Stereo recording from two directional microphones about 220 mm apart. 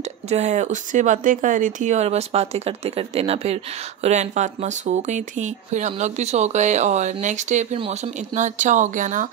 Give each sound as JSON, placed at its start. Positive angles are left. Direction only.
{"t": 0.3, "sound": "speech", "side_deg": -30}